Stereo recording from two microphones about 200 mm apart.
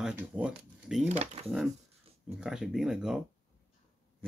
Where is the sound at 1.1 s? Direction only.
35° right (ahead or behind).